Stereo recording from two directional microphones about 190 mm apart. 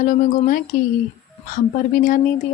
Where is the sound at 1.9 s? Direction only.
45° left (ahead or behind).